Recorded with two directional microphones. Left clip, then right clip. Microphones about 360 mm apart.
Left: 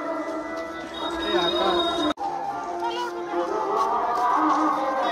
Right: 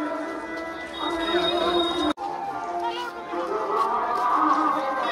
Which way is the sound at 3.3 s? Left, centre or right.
Left.